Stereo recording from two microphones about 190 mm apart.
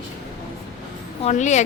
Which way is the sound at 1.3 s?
40° left (ahead or behind).